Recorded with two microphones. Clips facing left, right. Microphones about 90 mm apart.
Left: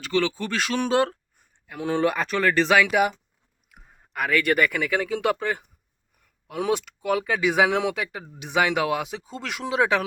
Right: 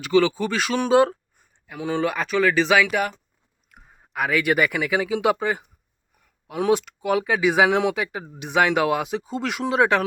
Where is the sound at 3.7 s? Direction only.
5° right (ahead or behind).